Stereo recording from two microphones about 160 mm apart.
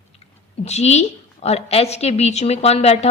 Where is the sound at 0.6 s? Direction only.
45° left (ahead or behind).